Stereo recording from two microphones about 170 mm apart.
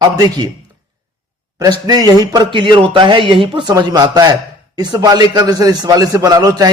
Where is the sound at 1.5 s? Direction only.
20° right (ahead or behind).